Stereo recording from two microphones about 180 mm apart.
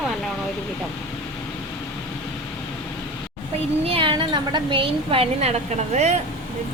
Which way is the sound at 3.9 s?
30° right (ahead or behind).